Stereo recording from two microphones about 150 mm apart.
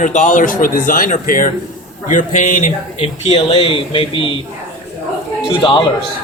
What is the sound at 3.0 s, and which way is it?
Speech, 35° left (ahead or behind).